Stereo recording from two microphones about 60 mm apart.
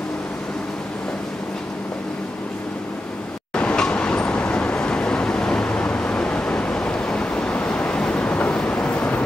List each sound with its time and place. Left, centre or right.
3.5 s vehicle: centre